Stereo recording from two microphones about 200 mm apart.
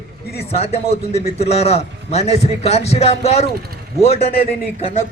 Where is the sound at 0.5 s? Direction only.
30° left (ahead or behind).